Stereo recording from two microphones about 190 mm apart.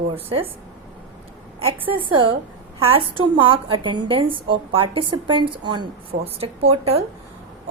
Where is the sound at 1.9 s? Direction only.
25° right (ahead or behind).